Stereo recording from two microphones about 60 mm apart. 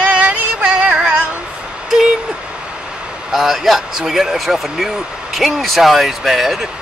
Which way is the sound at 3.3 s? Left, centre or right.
Centre.